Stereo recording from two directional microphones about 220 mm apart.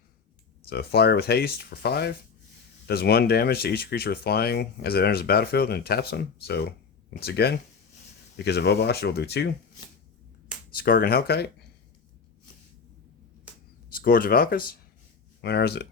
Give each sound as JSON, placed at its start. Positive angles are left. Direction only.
{"t": 0.7, "sound": "speech", "side_deg": 45}
{"t": 10.8, "sound": "speech", "side_deg": 45}
{"t": 13.9, "sound": "speech", "side_deg": 40}